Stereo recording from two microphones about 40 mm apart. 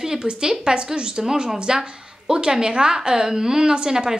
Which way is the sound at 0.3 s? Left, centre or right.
Centre.